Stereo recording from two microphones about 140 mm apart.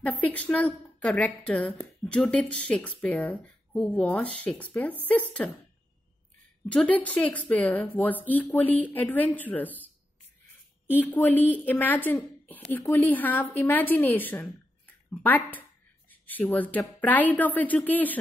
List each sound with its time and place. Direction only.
0.0 s a woman's voice: 10° left (ahead or behind)
6.7 s a woman's voice: 10° left (ahead or behind)
10.9 s a woman's voice: 15° left (ahead or behind)